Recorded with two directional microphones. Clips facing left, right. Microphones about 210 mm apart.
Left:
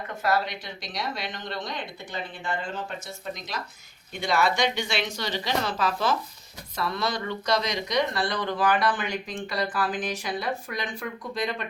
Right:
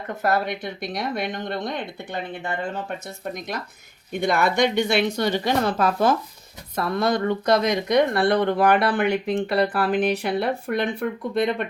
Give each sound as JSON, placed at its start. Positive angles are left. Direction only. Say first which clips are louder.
{"t": 0.3, "sound": "speech", "louder": "right 3 dB", "side_deg": -55}
{"t": 4.1, "sound": "a woman's voice", "louder": "right 4 dB", "side_deg": -55}